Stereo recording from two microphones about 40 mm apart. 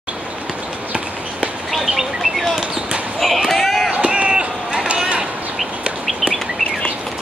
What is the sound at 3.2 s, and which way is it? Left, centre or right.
Slam, centre.